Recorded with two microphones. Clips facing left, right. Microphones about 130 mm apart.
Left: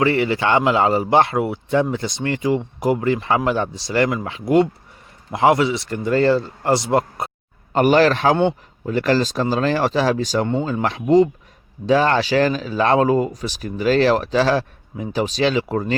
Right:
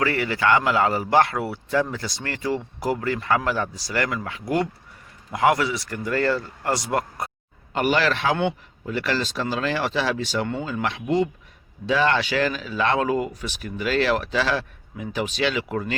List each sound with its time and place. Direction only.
0.0 s speech: 25° left (ahead or behind)
7.7 s speech: 40° left (ahead or behind)